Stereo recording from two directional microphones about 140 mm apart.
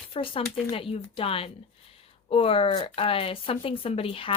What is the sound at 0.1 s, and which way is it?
A woman's voice, 40° left (ahead or behind).